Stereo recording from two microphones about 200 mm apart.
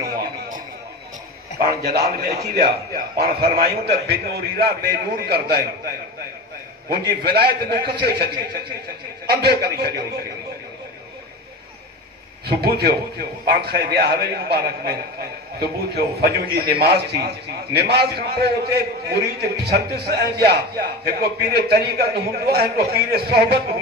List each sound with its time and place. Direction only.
1.8 s a man's voice: 50° right (ahead or behind)
6.9 s a man's voice: 50° right (ahead or behind)
12.4 s a man's voice: 50° right (ahead or behind)